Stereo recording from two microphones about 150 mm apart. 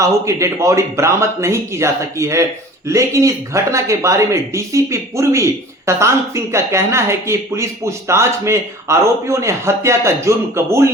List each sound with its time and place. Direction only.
0.0 s speech: 20° right (ahead or behind)